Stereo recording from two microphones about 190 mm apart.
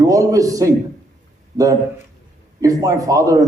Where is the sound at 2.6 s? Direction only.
20° right (ahead or behind).